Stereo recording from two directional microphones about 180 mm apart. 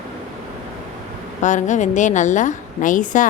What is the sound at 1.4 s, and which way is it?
A woman's voice, 45° left (ahead or behind).